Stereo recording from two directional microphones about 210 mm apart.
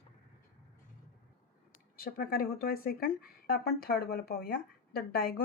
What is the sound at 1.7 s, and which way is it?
Speech, 45° left (ahead or behind).